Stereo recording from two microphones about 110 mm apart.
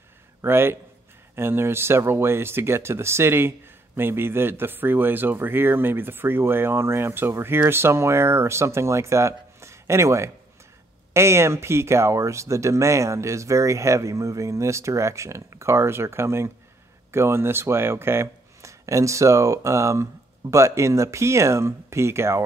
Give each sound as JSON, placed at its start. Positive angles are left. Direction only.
{"t": 0.4, "sound": "speech", "side_deg": -20}